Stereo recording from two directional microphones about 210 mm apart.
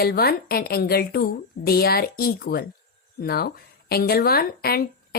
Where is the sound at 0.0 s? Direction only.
50° left (ahead or behind).